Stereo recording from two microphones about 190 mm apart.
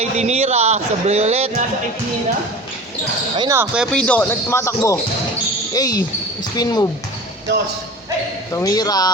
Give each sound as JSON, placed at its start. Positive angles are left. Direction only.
{"t": 0.0, "sound": "speech", "side_deg": -35}
{"t": 3.3, "sound": "speech", "side_deg": -20}
{"t": 3.8, "sound": "speech", "side_deg": 5}
{"t": 8.5, "sound": "speech", "side_deg": 20}